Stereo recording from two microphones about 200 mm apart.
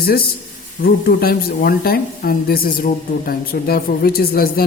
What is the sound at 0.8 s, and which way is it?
A woman's voice, 50° left (ahead or behind).